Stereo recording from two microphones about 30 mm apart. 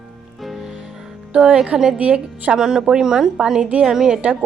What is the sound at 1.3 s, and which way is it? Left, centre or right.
Speech, right.